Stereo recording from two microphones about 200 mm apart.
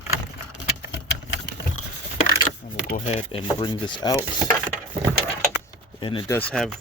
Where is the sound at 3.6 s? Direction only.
25° left (ahead or behind).